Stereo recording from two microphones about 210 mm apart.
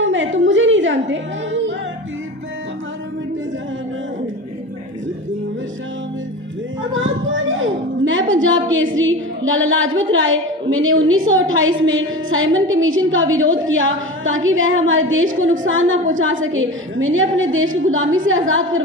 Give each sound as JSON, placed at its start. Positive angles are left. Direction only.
{"t": 0.0, "sound": "music", "side_deg": -65}
{"t": 6.8, "sound": "a sound", "side_deg": -65}
{"t": 10.1, "sound": "a woman's voice", "side_deg": -70}